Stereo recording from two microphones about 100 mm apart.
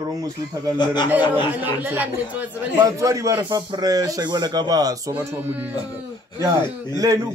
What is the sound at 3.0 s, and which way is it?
A man's voice, 35° right (ahead or behind).